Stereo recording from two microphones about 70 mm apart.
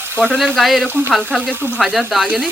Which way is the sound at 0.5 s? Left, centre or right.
Centre.